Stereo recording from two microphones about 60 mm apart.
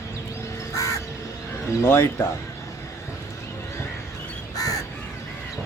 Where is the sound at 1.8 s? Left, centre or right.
Left.